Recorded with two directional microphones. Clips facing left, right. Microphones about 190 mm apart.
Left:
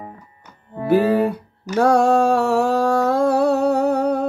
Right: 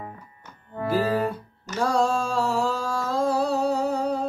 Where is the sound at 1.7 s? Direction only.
65° left (ahead or behind).